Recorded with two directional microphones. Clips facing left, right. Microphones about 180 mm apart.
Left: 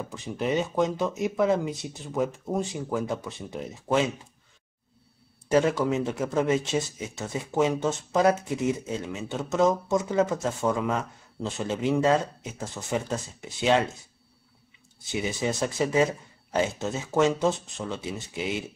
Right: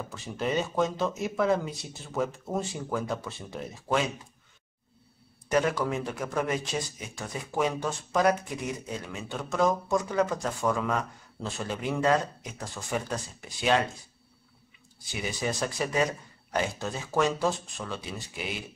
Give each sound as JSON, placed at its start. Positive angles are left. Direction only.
{"t": 0.1, "sound": "speech", "side_deg": 20}
{"t": 5.5, "sound": "speech", "side_deg": 25}
{"t": 15.1, "sound": "speech", "side_deg": 25}